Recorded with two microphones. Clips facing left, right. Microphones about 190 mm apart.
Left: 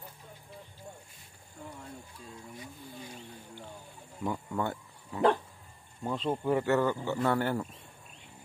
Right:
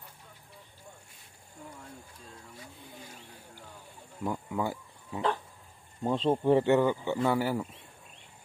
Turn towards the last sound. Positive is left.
turn(degrees=-5)  # may be behind; listen again after turning